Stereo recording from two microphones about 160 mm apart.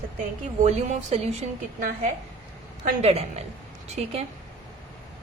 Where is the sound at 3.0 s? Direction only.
40° right (ahead or behind).